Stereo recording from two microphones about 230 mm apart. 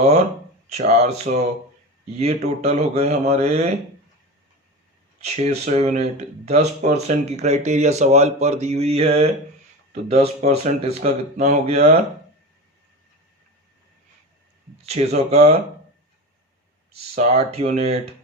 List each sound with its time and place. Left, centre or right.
0.7 s speech: right
5.2 s speech: right
14.8 s speech: right
17.2 s speech: right